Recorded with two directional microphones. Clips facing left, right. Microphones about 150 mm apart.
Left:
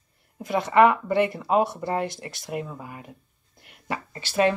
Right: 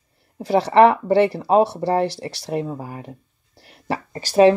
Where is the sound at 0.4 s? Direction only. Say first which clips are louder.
Right 5 dB; 35° right (ahead or behind).